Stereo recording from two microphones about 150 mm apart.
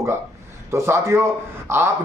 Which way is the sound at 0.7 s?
20° right (ahead or behind).